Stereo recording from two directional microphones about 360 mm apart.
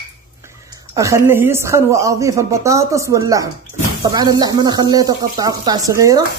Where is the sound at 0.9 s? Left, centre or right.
Centre.